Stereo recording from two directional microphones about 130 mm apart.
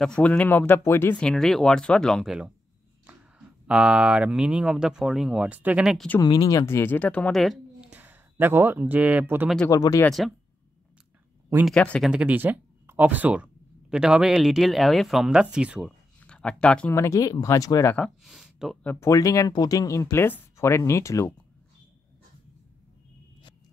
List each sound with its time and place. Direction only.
0.0 s speech: 10° left (ahead or behind)
1.2 s speech: centre (ahead or behind)
5.9 s speech: 10° left (ahead or behind)
6.2 s speech: 30° left (ahead or behind); by 7.4 s 10° left (ahead or behind)
7.4 s a sound: 5° right (ahead or behind)
9.7 s speech: 25° left (ahead or behind)
10.0 s speech: centre (ahead or behind)
11.6 s speech: 5° left (ahead or behind)
12.1 s speech: 10° right (ahead or behind)
16.2 s speech: 10° left (ahead or behind)
16.9 s speech: 25° left (ahead or behind)
17.9 s speech: centre (ahead or behind)
18.8 s speech: 10° left (ahead or behind)
19.0 s speech: 25° left (ahead or behind)